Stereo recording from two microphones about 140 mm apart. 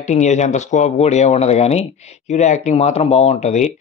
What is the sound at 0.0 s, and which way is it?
Speech, 55° left (ahead or behind).